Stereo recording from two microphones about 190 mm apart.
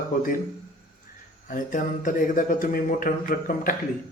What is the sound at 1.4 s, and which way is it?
A man's voice, 45° left (ahead or behind).